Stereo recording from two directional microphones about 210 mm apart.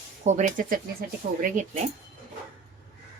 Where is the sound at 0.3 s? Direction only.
35° right (ahead or behind).